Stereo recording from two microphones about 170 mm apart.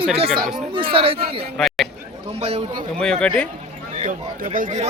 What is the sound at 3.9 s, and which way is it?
Speech, 45° right (ahead or behind).